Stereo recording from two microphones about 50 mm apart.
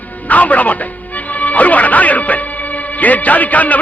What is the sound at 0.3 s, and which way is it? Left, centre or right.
Music, left.